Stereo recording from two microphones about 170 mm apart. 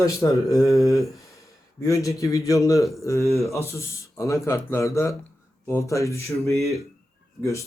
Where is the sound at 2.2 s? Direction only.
20° left (ahead or behind).